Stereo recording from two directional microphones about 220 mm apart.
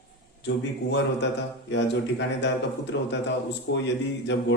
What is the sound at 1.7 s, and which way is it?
Speech, 55° left (ahead or behind).